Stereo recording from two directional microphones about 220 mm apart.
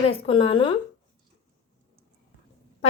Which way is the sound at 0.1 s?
25° left (ahead or behind).